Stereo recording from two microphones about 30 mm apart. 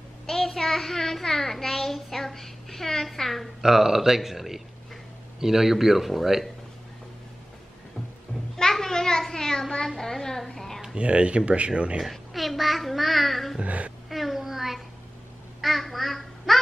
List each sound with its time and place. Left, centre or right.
0.3 s a child's voice: centre
3.6 s speech: centre
8.7 s a sound: centre
9.8 s a woman's voice: centre
10.4 s a sound: centre
11.0 s speech: right
12.0 s a child's voice: centre
13.6 s speech: right
14.0 s a sound: centre
15.6 s duck: centre